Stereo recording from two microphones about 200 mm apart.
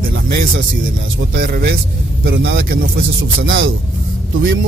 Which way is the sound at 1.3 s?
50° right (ahead or behind).